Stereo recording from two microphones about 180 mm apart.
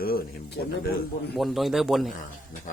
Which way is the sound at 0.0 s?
55° left (ahead or behind).